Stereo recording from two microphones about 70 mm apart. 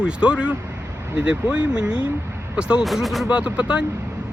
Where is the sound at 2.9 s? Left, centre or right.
Centre.